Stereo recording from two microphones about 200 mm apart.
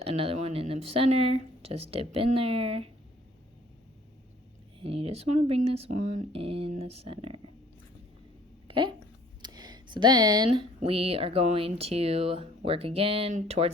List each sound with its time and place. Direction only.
0.0 s speech: 30° right (ahead or behind)
4.8 s speech: 30° right (ahead or behind)
8.6 s a sound: 25° right (ahead or behind)
10.8 s speech: 30° right (ahead or behind)